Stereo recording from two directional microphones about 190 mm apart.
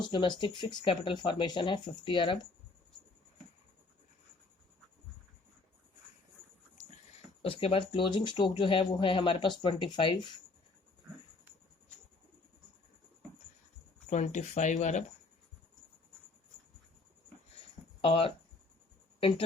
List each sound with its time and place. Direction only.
0.0 s speech: 25° left (ahead or behind)
7.4 s speech: 30° left (ahead or behind)
14.1 s speech: 40° left (ahead or behind)
18.0 s speech: 30° left (ahead or behind)